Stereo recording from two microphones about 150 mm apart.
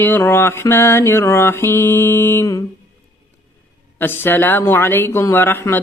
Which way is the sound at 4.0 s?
15° left (ahead or behind).